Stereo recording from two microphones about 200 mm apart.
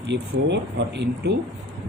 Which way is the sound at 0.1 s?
60° right (ahead or behind).